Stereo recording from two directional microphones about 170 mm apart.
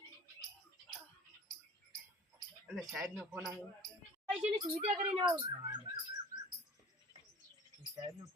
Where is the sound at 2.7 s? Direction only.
Centre (ahead or behind).